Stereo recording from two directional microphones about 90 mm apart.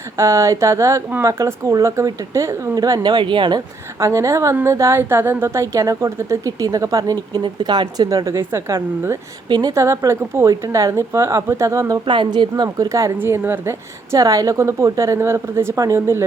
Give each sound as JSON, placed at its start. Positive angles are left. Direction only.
{"t": 0.2, "sound": "a woman's voice", "side_deg": -35}
{"t": 4.0, "sound": "a woman's voice", "side_deg": -35}
{"t": 9.5, "sound": "speech", "side_deg": -45}
{"t": 9.8, "sound": "a woman's voice", "side_deg": -35}
{"t": 12.0, "sound": "speech", "side_deg": -65}
{"t": 12.6, "sound": "a woman's voice", "side_deg": -40}
{"t": 13.1, "sound": "a woman's voice", "side_deg": -25}